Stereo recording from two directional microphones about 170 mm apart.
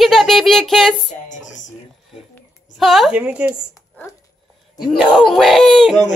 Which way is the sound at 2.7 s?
Centre (ahead or behind).